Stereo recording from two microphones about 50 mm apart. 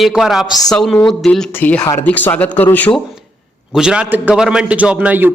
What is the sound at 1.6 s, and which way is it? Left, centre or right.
Speech, left.